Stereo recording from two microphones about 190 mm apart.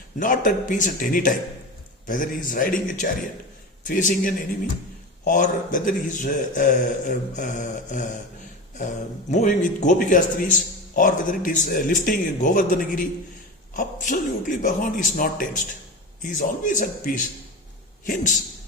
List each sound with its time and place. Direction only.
0.2 s speech: 45° left (ahead or behind)